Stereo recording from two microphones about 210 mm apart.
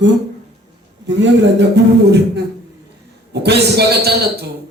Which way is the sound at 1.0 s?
55° right (ahead or behind).